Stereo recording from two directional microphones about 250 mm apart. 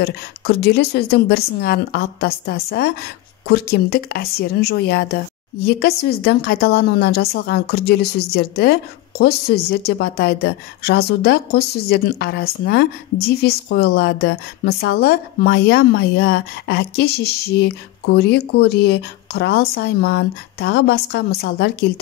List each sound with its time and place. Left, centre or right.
0.0 s a woman's voice: left